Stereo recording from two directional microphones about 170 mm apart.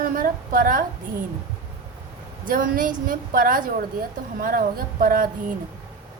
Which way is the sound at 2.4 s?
55° right (ahead or behind).